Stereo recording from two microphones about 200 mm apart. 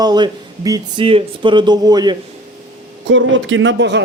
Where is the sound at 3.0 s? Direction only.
70° right (ahead or behind).